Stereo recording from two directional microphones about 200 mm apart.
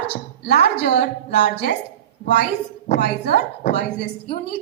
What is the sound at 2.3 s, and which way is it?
A woman's voice, 50° left (ahead or behind).